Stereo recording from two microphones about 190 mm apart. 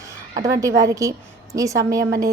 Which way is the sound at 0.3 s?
15° right (ahead or behind).